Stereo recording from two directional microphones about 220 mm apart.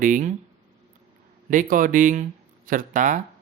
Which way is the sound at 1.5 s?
35° right (ahead or behind).